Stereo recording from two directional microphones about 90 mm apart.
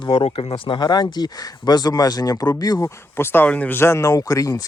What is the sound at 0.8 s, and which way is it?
Speech, 50° left (ahead or behind).